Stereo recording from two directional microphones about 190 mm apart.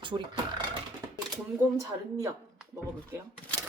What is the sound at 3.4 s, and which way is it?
Speech, 5° left (ahead or behind).